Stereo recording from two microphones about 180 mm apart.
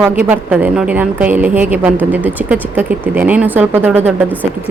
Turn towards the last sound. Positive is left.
turn(degrees=-10)  # may be behind; listen again after turning